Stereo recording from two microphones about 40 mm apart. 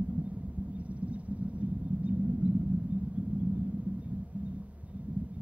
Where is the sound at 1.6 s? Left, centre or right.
Right.